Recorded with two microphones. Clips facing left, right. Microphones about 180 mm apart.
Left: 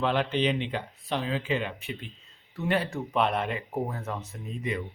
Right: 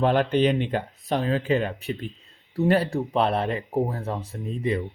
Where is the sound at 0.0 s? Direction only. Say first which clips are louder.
Right 6 dB; 45° right (ahead or behind).